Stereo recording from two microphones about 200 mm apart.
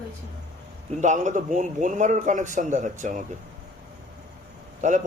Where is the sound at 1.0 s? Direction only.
35° right (ahead or behind).